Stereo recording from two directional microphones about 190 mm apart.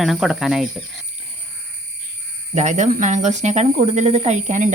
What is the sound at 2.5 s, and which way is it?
Speech, 40° right (ahead or behind).